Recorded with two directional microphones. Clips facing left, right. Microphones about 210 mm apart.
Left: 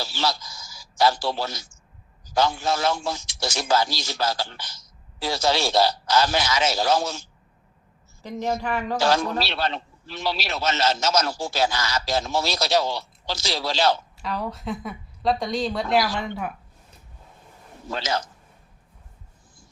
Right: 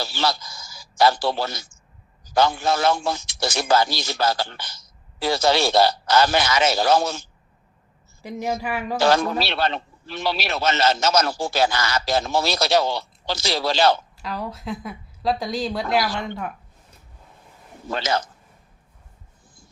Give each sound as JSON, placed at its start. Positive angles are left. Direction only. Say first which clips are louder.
{"t": 0.0, "sound": "a man's voice", "louder": "right 2 dB", "side_deg": -60}
{"t": 8.2, "sound": "a woman's voice", "louder": "even", "side_deg": -10}
{"t": 9.0, "sound": "a man's voice", "louder": "right 4 dB", "side_deg": -60}
{"t": 14.2, "sound": "speech", "louder": "left 1 dB", "side_deg": 0}
{"t": 17.8, "sound": "a man's voice", "louder": "right 3 dB", "side_deg": -60}